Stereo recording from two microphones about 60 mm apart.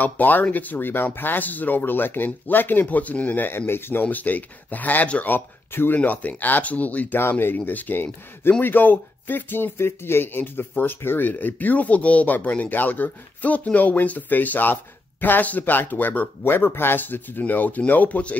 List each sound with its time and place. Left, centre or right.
0.0 s speech: left
4.0 s speech: left
5.3 s speech: left
7.2 s speech: left